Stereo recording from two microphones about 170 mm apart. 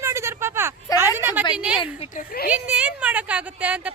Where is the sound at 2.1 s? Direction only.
60° left (ahead or behind).